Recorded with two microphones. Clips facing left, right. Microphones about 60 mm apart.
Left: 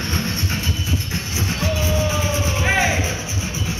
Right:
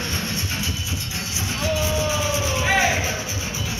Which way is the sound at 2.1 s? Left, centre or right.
Left.